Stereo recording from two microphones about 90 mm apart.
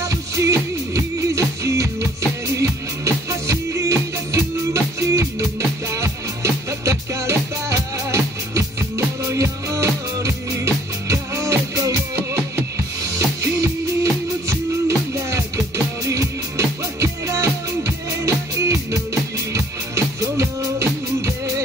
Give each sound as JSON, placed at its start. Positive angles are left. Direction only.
{"t": 0.0, "sound": "music", "side_deg": -35}